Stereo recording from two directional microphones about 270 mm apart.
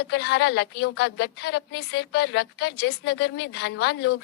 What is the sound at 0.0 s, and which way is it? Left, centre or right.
A woman's voice, left.